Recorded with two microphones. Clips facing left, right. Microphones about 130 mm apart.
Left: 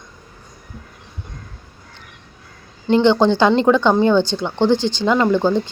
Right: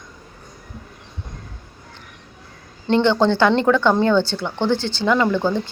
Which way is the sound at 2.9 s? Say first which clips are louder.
Left 3 dB; 15° left (ahead or behind).